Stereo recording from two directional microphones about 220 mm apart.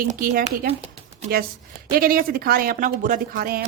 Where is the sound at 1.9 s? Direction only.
40° right (ahead or behind).